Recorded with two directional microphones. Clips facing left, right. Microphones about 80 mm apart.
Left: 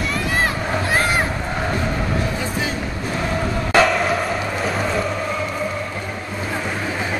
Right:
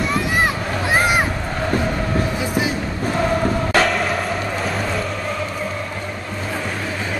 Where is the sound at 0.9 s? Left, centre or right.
Centre.